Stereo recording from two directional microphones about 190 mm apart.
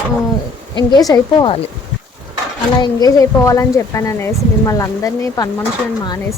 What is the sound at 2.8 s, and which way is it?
Speech, 20° left (ahead or behind).